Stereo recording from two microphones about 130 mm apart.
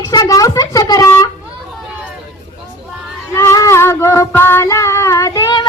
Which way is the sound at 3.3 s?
20° left (ahead or behind).